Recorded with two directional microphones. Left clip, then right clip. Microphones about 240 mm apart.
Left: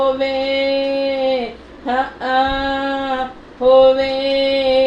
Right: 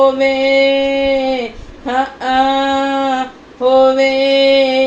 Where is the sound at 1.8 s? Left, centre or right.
Right.